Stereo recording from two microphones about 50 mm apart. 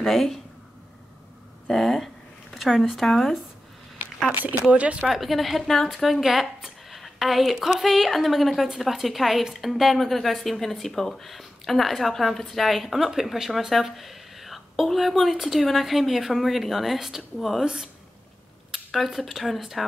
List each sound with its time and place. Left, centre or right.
0.0 s a woman's voice: centre
1.7 s a woman's voice: centre
2.5 s a sound: centre
2.8 s a woman's voice: centre
4.3 s speech: right
5.1 s a woman's voice: centre
18.9 s a woman's voice: centre